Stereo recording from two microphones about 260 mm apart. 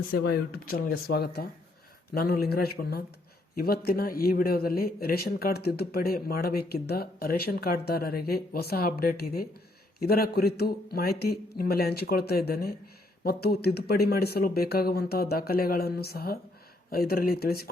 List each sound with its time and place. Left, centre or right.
0.1 s a man's voice: left